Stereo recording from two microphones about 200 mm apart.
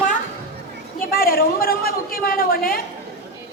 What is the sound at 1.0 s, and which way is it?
A woman's voice, 45° left (ahead or behind).